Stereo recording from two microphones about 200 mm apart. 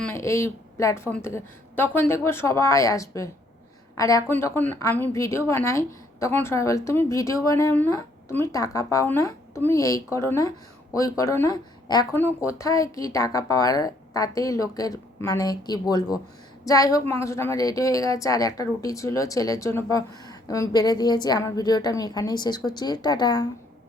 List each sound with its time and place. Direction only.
0.0 s speech: 15° left (ahead or behind)